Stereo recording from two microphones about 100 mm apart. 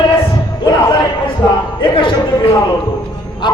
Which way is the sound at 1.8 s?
55° left (ahead or behind).